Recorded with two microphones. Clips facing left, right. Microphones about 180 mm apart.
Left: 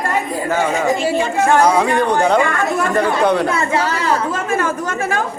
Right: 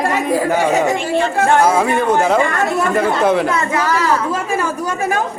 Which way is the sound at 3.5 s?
30° left (ahead or behind).